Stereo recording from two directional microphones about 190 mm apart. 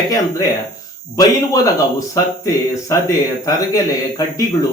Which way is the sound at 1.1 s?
20° left (ahead or behind).